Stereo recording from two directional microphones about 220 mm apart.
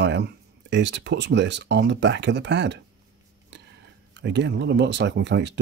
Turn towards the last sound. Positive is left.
turn(degrees=-50)  # may be behind; listen again after turning